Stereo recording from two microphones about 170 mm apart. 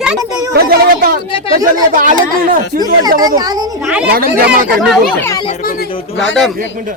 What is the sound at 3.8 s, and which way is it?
Speech, 5° right (ahead or behind).